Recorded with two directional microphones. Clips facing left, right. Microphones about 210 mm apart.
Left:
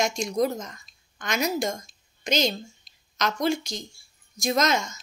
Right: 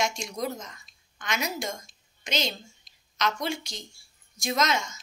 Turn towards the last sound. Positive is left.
turn(degrees=40)  # may be behind; listen again after turning